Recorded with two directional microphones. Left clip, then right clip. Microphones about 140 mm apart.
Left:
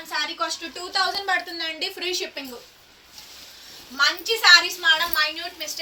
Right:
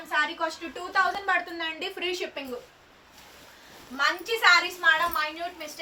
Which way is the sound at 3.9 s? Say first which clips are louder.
Left 4 dB; 15° right (ahead or behind).